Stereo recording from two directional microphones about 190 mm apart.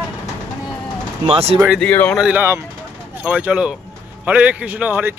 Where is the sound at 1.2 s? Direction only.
35° right (ahead or behind).